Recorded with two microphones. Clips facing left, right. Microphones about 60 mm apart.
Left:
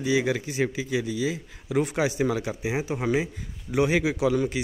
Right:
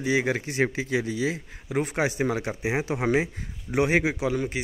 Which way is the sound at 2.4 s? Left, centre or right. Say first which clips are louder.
Right 1 dB; right.